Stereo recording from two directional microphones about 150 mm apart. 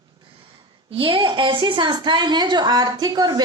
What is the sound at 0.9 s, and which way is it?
A woman's voice, 35° right (ahead or behind).